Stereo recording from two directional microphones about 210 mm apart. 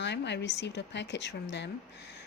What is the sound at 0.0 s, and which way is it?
A woman's voice, 55° left (ahead or behind).